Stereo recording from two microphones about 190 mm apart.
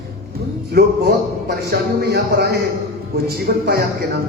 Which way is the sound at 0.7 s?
55° right (ahead or behind).